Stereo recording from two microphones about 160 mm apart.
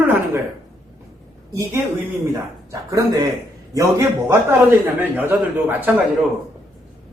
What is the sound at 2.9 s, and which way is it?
A man's voice, 25° right (ahead or behind).